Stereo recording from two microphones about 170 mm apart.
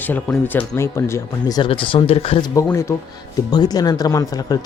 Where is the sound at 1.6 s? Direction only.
30° left (ahead or behind).